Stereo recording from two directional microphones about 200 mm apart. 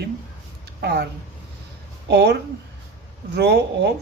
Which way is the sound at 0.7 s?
55° right (ahead or behind).